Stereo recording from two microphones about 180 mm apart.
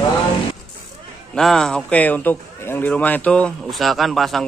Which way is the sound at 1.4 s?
5° left (ahead or behind).